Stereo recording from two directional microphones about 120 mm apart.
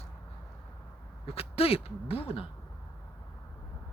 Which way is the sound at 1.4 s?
55° left (ahead or behind).